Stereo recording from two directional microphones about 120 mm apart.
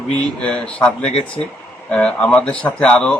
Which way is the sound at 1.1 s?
60° left (ahead or behind).